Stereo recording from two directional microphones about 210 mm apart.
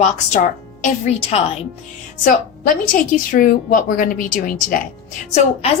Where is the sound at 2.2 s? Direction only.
40° left (ahead or behind).